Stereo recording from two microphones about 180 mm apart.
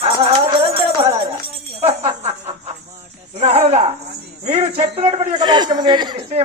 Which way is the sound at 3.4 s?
35° right (ahead or behind).